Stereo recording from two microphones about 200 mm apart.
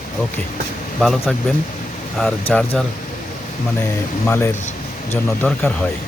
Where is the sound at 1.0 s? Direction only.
Centre (ahead or behind).